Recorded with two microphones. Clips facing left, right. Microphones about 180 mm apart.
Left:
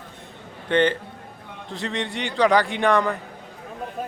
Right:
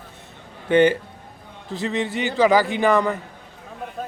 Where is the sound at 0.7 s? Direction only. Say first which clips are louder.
Right 4 dB; 10° right (ahead or behind).